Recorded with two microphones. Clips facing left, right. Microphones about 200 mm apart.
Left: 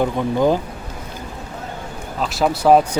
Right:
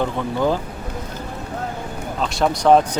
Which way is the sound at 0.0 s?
15° left (ahead or behind).